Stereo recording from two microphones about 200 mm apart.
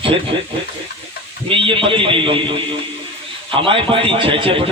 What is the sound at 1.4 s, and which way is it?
A man's voice, 25° right (ahead or behind).